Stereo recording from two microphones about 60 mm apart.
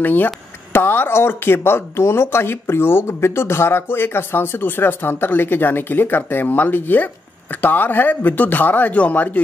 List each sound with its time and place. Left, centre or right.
0.0 s speech: left